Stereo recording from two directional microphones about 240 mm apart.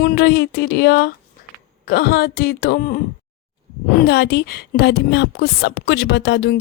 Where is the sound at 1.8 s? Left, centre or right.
Left.